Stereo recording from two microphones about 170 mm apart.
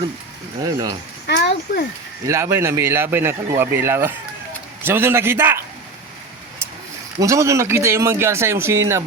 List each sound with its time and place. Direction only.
0.6 s speech: 20° right (ahead or behind)
1.3 s speech: 90° left
2.2 s speech: 15° right (ahead or behind)
7.2 s speech: 20° right (ahead or behind)